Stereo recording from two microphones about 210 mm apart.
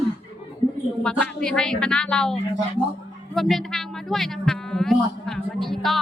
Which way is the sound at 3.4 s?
Centre (ahead or behind).